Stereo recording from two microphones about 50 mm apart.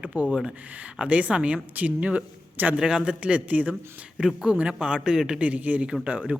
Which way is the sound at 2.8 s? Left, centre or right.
Centre.